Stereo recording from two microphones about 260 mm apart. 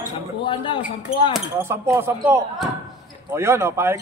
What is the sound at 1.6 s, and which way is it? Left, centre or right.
Speech, centre.